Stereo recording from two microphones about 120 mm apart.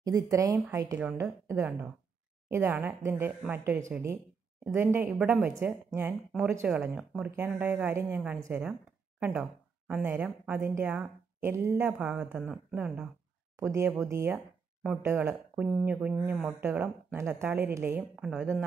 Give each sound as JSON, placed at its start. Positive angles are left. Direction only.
{"t": 0.0, "sound": "speech", "side_deg": -25}
{"t": 5.2, "sound": "speech", "side_deg": -15}
{"t": 9.8, "sound": "speech", "side_deg": -10}
{"t": 13.6, "sound": "speech", "side_deg": -20}
{"t": 14.3, "sound": "a sound", "side_deg": -5}
{"t": 15.0, "sound": "speech", "side_deg": -15}
{"t": 18.2, "sound": "speech", "side_deg": -5}